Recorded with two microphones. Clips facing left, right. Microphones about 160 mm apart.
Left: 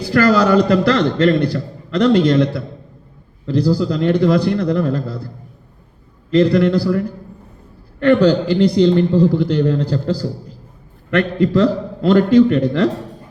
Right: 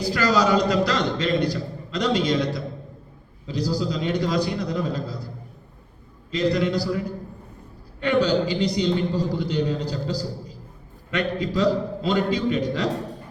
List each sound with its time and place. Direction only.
0.0 s a man's voice: 60° left (ahead or behind)
6.3 s a man's voice: 60° left (ahead or behind)